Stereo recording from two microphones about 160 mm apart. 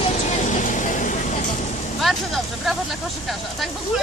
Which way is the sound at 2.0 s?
Centre (ahead or behind).